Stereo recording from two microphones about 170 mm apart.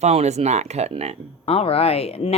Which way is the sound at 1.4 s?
35° left (ahead or behind).